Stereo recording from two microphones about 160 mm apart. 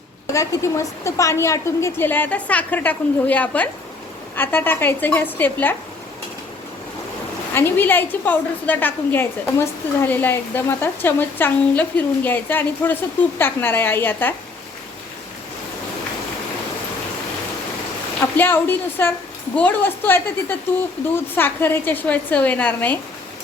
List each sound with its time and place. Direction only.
0.3 s a woman's voice: 20° left (ahead or behind)
7.5 s a woman's voice: 15° left (ahead or behind)
18.3 s a woman's voice: 10° left (ahead or behind)